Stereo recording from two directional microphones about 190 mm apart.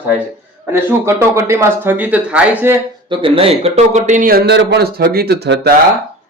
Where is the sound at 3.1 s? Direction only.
25° right (ahead or behind); by 5.7 s 60° right (ahead or behind).